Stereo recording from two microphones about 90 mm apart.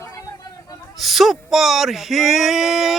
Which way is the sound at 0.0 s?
40° left (ahead or behind).